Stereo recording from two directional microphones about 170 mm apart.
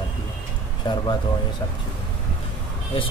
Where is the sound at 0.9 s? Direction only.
25° left (ahead or behind).